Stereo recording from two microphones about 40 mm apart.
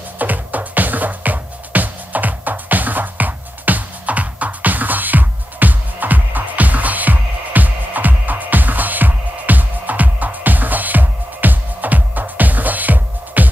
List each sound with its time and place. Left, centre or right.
0.2 s music: right